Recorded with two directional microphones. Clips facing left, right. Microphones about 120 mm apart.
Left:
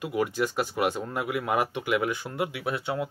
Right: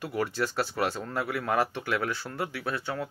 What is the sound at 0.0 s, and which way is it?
Speech, 10° left (ahead or behind).